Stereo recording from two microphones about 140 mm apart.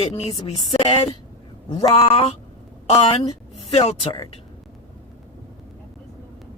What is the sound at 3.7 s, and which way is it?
Speech, 45° left (ahead or behind).